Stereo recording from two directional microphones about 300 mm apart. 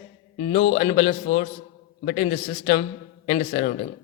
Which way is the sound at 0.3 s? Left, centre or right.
Centre.